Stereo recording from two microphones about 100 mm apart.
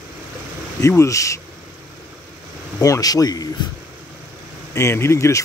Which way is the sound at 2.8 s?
35° left (ahead or behind).